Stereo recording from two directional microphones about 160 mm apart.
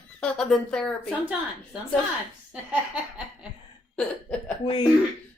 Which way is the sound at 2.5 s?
5° right (ahead or behind).